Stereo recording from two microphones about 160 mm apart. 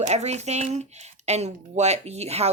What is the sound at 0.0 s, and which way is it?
Speech, 45° right (ahead or behind).